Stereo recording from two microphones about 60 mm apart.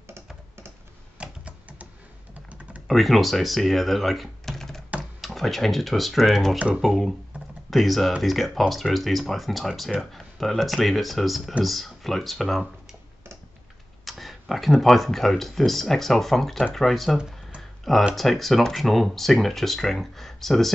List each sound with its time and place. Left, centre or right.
1.1 s a sound: right
2.9 s speech: centre
14.0 s speech: centre
17.6 s typing: centre
18.1 s speech: centre